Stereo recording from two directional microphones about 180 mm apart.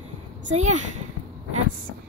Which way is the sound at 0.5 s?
40° right (ahead or behind).